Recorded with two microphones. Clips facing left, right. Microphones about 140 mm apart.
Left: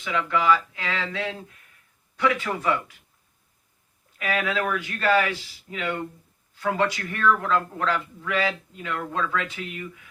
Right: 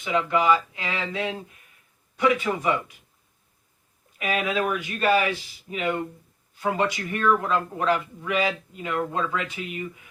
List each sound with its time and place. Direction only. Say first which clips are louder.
0.0 s speech: right 2 dB; 20° right (ahead or behind)
4.2 s speech: right 1 dB; 20° right (ahead or behind)